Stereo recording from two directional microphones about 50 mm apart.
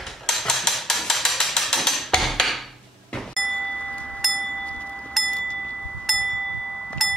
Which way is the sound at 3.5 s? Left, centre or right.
Left.